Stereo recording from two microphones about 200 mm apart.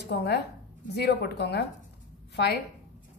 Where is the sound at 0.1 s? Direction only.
55° left (ahead or behind).